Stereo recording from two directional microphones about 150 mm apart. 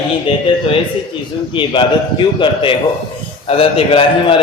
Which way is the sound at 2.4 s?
35° left (ahead or behind).